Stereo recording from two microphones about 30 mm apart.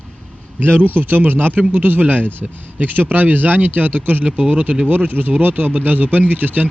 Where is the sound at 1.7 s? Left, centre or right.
Right.